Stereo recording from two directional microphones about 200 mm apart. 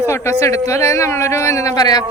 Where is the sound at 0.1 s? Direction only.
15° left (ahead or behind).